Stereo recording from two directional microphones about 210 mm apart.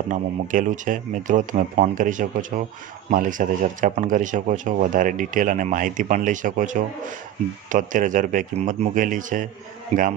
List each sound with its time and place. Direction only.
0.1 s speech: 40° right (ahead or behind)